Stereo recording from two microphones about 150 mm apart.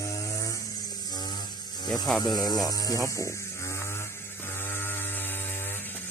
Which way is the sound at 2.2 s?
25° left (ahead or behind).